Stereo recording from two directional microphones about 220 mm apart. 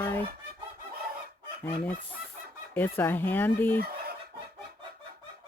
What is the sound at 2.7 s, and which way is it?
Speech, 10° left (ahead or behind).